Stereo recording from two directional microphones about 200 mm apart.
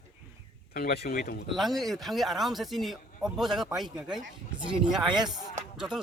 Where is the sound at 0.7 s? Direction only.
50° left (ahead or behind).